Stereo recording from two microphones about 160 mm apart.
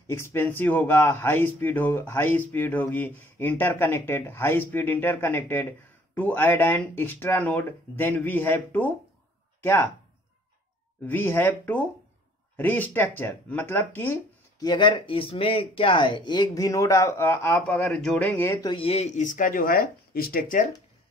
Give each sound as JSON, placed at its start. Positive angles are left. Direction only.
{"t": 0.0, "sound": "speech", "side_deg": 15}
{"t": 11.0, "sound": "speech", "side_deg": 10}
{"t": 14.7, "sound": "speech", "side_deg": 30}
{"t": 18.4, "sound": "speech", "side_deg": 15}
{"t": 18.7, "sound": "speech", "side_deg": 35}